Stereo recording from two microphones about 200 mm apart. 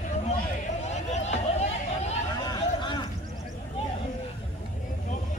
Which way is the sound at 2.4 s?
20° left (ahead or behind).